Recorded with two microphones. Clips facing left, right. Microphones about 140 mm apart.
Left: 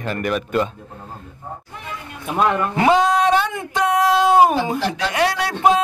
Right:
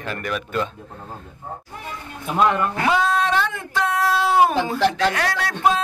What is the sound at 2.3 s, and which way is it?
Speech, 10° left (ahead or behind).